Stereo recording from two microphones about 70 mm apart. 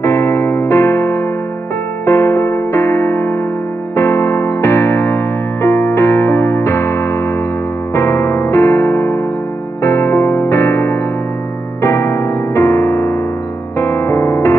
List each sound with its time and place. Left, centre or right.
0.0 s music: left
7.9 s electric piano: left
9.8 s music: left